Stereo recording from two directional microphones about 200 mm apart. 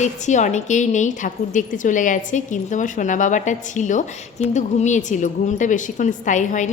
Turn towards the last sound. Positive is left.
turn(degrees=40)  # may be behind; listen again after turning